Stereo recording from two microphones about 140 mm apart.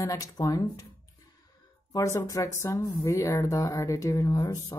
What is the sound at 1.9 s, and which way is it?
Speech, 20° left (ahead or behind).